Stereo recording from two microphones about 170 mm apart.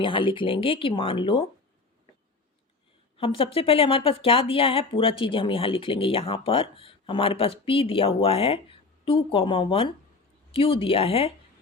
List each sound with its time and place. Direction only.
0.0 s speech: 30° left (ahead or behind)
3.2 s speech: 30° left (ahead or behind)